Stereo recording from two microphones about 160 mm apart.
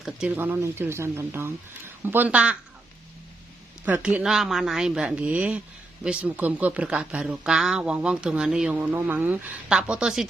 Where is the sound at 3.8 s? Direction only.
10° right (ahead or behind).